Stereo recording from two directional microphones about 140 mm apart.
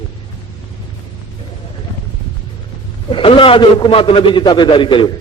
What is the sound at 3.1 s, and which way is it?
A man's voice, 40° left (ahead or behind).